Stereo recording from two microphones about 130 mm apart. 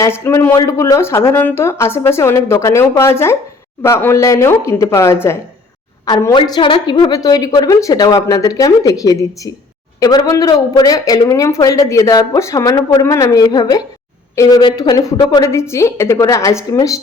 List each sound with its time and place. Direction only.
0.0 s speech: 20° left (ahead or behind)
6.3 s speech: 40° left (ahead or behind)